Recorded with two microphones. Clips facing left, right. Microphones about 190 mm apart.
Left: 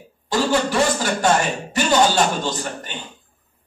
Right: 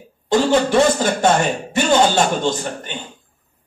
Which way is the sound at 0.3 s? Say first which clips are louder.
Right 4 dB; 20° right (ahead or behind).